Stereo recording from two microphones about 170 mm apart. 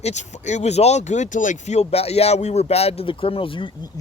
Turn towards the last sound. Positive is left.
turn(degrees=30)  # may be behind; listen again after turning